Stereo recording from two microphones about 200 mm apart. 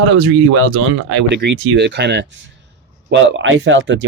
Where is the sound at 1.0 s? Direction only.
60° right (ahead or behind).